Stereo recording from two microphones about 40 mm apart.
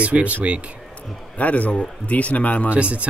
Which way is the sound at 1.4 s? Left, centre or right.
Left.